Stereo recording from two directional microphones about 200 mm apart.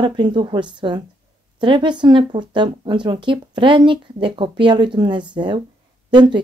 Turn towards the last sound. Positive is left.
turn(degrees=-20)  # may be behind; listen again after turning